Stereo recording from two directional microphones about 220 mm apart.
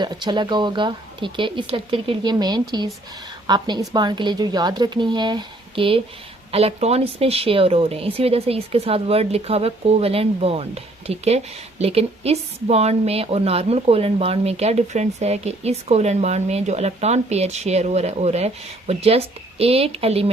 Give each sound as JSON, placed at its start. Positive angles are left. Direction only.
{"t": 0.0, "sound": "a woman's voice", "side_deg": -20}